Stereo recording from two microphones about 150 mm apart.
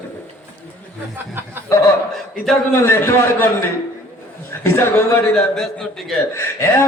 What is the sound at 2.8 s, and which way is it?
Speech, 15° left (ahead or behind).